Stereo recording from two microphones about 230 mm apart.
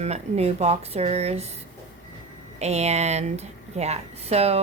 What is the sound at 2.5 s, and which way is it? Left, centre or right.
Speech, right.